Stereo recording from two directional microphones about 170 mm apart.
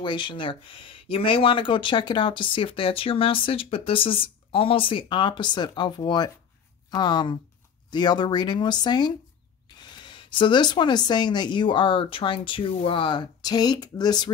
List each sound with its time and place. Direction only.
0.0 s speech: 30° left (ahead or behind)